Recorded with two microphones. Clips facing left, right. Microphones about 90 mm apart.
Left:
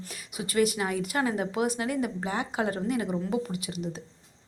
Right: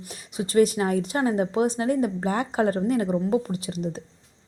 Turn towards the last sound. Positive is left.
turn(degrees=-35)  # may be behind; listen again after turning